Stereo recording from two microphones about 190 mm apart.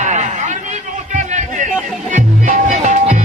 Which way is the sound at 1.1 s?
40° right (ahead or behind).